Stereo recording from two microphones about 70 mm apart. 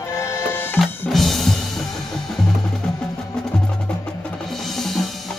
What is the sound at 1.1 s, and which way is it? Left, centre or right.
Music, centre.